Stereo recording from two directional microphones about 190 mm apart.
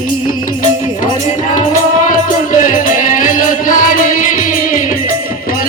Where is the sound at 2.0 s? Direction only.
45° left (ahead or behind).